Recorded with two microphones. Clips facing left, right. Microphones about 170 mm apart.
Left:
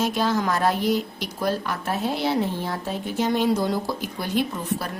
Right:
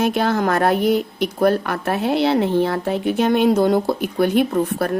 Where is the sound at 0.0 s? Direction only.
60° right (ahead or behind).